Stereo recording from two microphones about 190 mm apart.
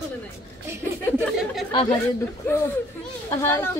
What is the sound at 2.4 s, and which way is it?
A woman's voice, 10° left (ahead or behind).